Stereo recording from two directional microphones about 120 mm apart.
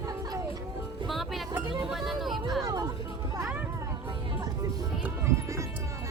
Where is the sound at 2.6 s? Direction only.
30° right (ahead or behind).